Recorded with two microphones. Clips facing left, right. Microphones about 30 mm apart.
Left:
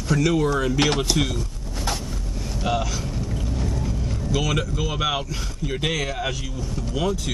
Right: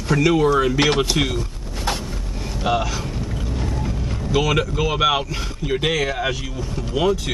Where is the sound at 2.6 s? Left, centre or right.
Centre.